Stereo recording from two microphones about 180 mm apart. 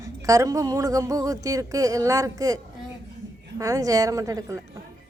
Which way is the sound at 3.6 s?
20° right (ahead or behind).